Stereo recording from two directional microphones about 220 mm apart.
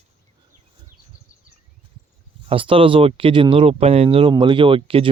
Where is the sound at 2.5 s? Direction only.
25° right (ahead or behind).